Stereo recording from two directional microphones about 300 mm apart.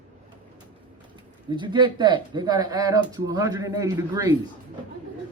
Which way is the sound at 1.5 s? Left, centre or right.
Centre.